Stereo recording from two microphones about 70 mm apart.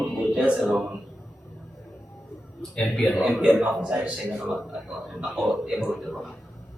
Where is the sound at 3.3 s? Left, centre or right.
Centre.